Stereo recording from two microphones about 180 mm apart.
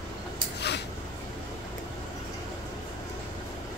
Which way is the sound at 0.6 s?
70° left (ahead or behind).